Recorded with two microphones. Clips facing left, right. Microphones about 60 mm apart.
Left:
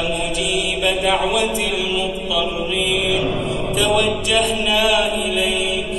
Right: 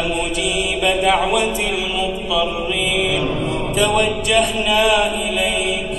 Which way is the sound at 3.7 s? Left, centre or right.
Centre.